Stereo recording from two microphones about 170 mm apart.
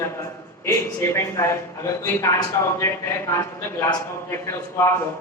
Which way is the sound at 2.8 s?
15° left (ahead or behind).